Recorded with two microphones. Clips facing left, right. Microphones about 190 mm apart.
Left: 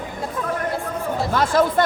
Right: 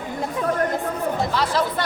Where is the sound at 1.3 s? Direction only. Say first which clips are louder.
Left 4 dB; 50° left (ahead or behind).